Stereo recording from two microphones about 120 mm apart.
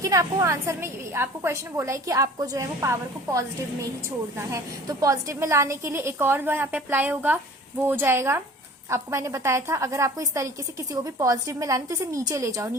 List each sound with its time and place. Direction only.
0.0 s a woman's voice: 25° right (ahead or behind)